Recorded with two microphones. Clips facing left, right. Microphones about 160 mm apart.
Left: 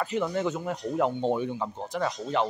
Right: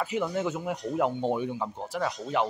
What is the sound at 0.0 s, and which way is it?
Speech, 5° right (ahead or behind).